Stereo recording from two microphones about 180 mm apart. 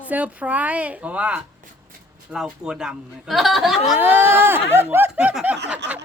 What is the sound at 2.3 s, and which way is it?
Speech, 5° right (ahead or behind).